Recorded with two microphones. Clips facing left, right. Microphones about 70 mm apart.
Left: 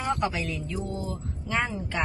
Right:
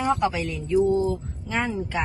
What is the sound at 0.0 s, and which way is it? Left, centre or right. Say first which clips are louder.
A woman's voice: right 5 dB; centre.